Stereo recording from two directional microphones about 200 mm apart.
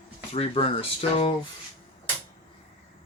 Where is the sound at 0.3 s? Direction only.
30° left (ahead or behind).